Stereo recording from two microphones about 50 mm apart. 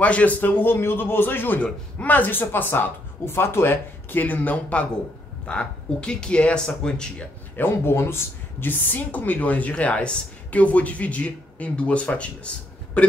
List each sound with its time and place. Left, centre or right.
0.0 s speech: left
1.6 s speech: left; by 7.2 s centre
7.5 s speech: left